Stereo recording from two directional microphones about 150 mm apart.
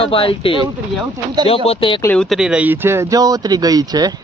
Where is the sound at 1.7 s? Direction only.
35° left (ahead or behind).